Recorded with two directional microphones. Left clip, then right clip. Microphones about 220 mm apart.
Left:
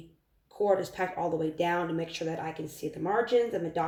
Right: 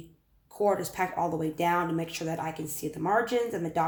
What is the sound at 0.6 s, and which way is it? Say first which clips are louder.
Speech: even; 20° right (ahead or behind).